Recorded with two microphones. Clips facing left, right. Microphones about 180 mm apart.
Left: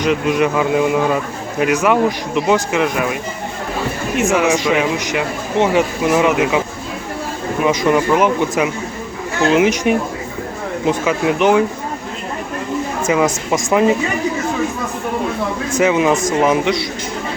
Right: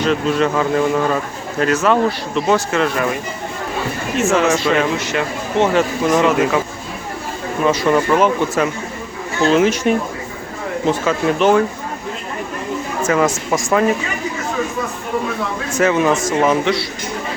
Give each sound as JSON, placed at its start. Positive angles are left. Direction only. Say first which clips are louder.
{"t": 0.0, "sound": "speech", "louder": "left 1 dB", "side_deg": 15}
{"t": 4.2, "sound": "speech", "louder": "even", "side_deg": 10}
{"t": 7.6, "sound": "speech", "louder": "even", "side_deg": 15}
{"t": 13.0, "sound": "speech", "louder": "even", "side_deg": 15}
{"t": 15.8, "sound": "speech", "louder": "left 1 dB", "side_deg": 15}